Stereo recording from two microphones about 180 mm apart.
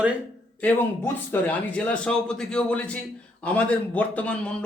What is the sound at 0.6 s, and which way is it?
A man's voice, 10° left (ahead or behind).